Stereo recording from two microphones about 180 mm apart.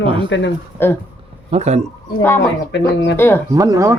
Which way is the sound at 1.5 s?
35° right (ahead or behind).